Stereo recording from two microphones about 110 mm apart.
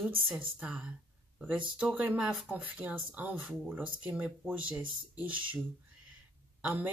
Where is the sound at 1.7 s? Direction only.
10° right (ahead or behind).